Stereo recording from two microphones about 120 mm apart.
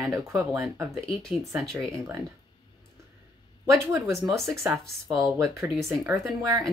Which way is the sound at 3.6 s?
25° right (ahead or behind).